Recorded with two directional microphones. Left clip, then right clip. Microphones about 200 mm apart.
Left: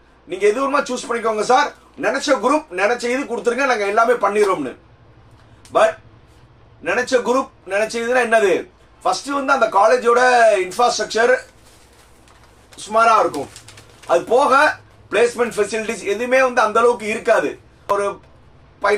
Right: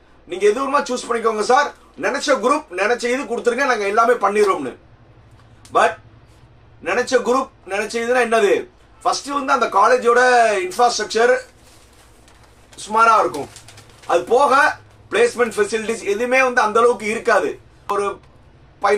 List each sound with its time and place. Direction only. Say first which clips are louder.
0.3 s speech: even; 10° right (ahead or behind)
5.7 s speech: left 1 dB; 10° right (ahead or behind)
12.7 s speech: even; 15° right (ahead or behind)
17.9 s speech: left 2 dB; centre (ahead or behind)